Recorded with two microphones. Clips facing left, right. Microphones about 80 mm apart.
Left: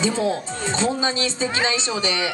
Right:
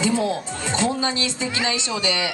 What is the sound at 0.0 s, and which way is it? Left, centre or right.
Speech, left.